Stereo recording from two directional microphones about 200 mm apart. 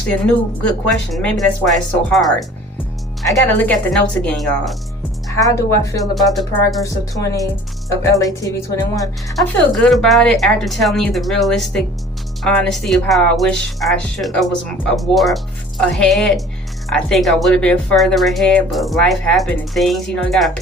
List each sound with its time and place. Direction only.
0.1 s speech: 5° left (ahead or behind)
5.5 s speech: 15° left (ahead or behind)
6.1 s speech: centre (ahead or behind)
6.8 s speech: 15° left (ahead or behind)
9.3 s speech: centre (ahead or behind)